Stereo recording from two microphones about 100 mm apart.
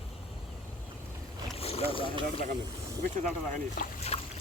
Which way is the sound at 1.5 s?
80° left.